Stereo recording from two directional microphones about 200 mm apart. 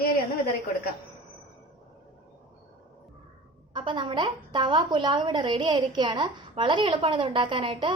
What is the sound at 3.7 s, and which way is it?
A woman's voice, 25° right (ahead or behind).